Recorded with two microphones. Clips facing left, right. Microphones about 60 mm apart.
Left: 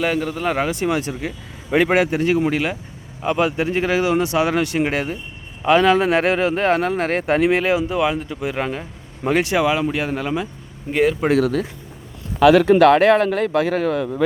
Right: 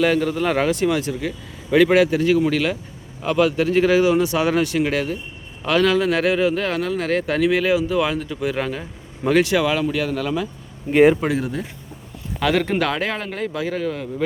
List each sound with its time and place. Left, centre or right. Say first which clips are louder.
0.0 s speech: right 2 dB; centre
0.8 s speech: right 1 dB; left
7.9 s speech: left 1 dB; centre
11.3 s speech: left 7 dB; left
12.8 s speech: left 11 dB; left